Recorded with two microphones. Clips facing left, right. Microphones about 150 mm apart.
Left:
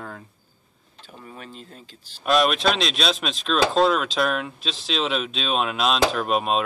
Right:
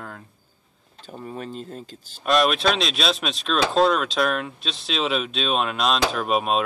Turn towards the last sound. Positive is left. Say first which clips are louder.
# even
turn(degrees=0)  # may be behind; listen again after turning